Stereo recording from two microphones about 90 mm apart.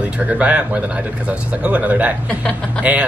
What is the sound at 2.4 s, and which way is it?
Speech, 10° left (ahead or behind).